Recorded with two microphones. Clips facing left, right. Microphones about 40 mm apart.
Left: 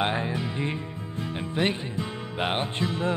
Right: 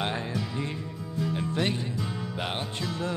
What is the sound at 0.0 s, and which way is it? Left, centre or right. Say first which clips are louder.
Music: left 4 dB; left.